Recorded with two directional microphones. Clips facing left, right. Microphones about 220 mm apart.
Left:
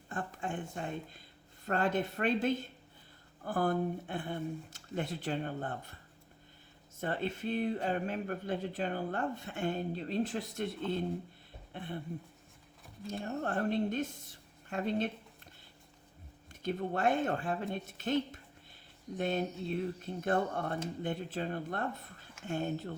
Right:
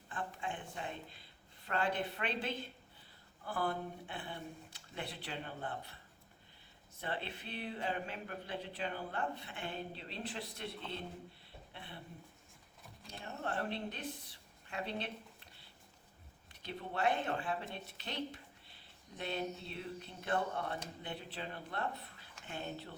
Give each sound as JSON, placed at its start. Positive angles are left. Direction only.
{"t": 0.1, "sound": "speech", "side_deg": 45}
{"t": 7.0, "sound": "speech", "side_deg": 45}
{"t": 13.1, "sound": "speech", "side_deg": 45}
{"t": 16.5, "sound": "speech", "side_deg": 50}